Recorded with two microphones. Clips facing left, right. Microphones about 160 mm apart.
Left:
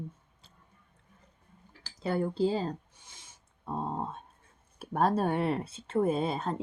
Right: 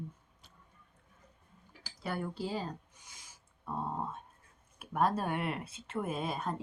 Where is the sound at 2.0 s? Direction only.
25° left (ahead or behind).